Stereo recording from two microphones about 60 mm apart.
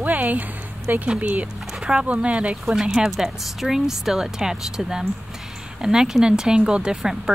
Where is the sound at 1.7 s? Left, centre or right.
Centre.